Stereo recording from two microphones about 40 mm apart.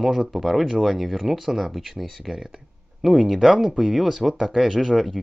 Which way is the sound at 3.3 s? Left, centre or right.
Centre.